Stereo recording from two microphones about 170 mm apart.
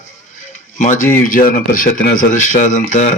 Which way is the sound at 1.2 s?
55° left (ahead or behind).